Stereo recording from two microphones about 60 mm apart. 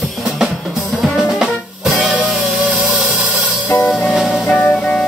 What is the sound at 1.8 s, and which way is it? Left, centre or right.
Music, right.